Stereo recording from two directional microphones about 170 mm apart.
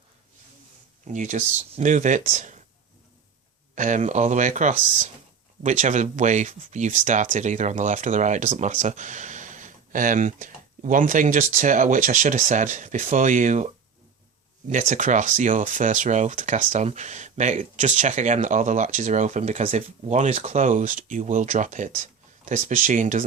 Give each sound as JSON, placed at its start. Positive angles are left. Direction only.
{"t": 1.0, "sound": "speech", "side_deg": -45}
{"t": 3.8, "sound": "speech", "side_deg": -45}
{"t": 14.7, "sound": "speech", "side_deg": -45}